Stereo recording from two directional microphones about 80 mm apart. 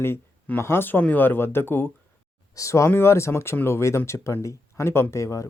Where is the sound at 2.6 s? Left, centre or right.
Left.